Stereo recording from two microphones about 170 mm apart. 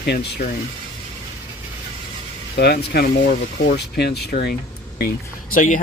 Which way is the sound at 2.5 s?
70° left (ahead or behind).